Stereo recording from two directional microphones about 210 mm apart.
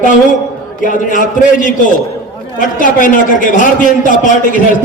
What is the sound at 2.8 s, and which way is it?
A man's voice, 40° left (ahead or behind).